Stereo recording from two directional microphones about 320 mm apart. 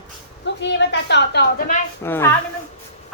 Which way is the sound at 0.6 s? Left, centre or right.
Left.